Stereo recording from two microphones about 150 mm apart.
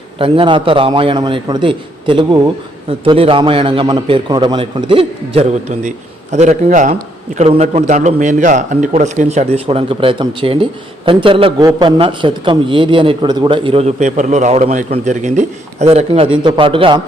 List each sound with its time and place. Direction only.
0.2 s a man's voice: 35° right (ahead or behind); by 6.9 s 60° right (ahead or behind)
7.3 s a man's voice: 40° right (ahead or behind)
13.8 s a man's voice: 55° right (ahead or behind); by 17.0 s 35° right (ahead or behind)